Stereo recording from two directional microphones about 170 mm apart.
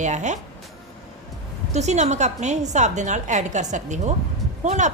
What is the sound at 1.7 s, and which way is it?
A woman's voice, 40° right (ahead or behind).